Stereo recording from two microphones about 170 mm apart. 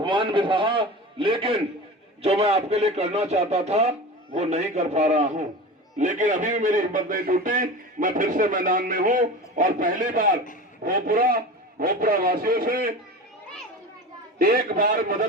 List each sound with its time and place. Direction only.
0.0 s a man's voice: 30° right (ahead or behind); by 12.9 s 60° right (ahead or behind)
14.3 s a man's voice: 55° right (ahead or behind)